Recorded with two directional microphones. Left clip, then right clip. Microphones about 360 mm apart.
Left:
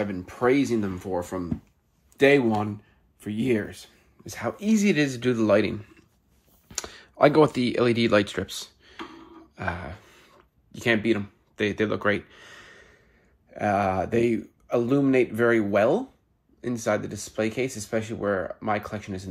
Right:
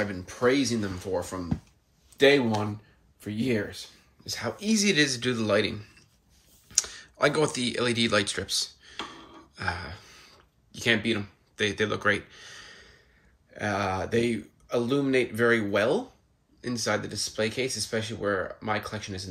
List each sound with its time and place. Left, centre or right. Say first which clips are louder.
0.0 s speech: left 1 dB; centre
9.6 s a sound: left 1 dB; centre
13.5 s speech: left 5 dB; centre